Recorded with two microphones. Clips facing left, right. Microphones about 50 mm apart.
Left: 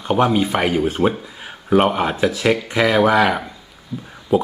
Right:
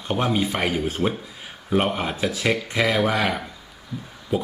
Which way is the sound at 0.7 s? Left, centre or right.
Centre.